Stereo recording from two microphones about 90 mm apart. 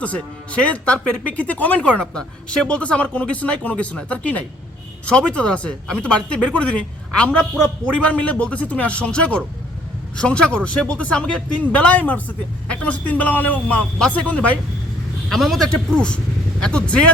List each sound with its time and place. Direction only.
0.0 s speech: 15° left (ahead or behind)
15.3 s a man's voice: centre (ahead or behind)